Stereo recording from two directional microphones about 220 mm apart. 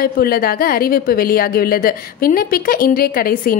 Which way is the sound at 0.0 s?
40° left (ahead or behind).